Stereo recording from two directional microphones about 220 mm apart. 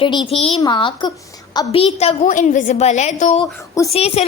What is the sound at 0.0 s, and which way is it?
A child's voice, 20° left (ahead or behind).